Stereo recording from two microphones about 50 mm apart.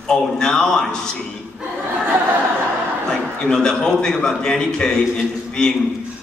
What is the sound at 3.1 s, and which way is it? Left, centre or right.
A man's voice, centre.